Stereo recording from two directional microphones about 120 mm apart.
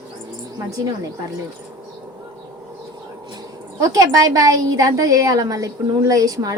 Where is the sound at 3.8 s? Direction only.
30° right (ahead or behind).